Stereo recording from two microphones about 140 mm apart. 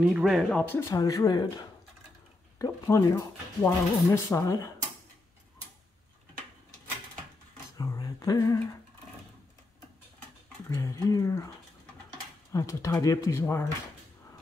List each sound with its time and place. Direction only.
0.0 s speech: 5° right (ahead or behind)
0.7 s speech: 25° left (ahead or behind)
7.7 s humming: 25° left (ahead or behind)
10.7 s speech: 25° left (ahead or behind)
12.5 s speech: 20° left (ahead or behind)